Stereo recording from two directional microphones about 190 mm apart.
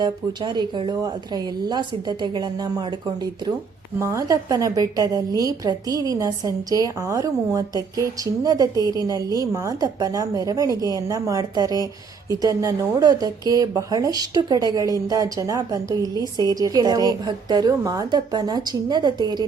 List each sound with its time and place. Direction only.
0.0 s a woman's voice: 20° right (ahead or behind)
4.0 s a woman's voice: 15° right (ahead or behind)